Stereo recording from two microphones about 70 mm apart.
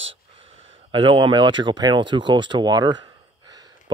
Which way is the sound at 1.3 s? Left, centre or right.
Right.